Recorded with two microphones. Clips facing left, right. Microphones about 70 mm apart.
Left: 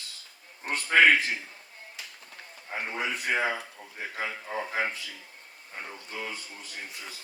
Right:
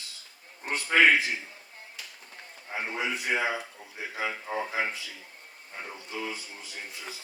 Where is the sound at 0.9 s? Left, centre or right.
Left.